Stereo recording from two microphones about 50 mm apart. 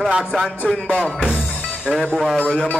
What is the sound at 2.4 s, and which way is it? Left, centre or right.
Speech, centre.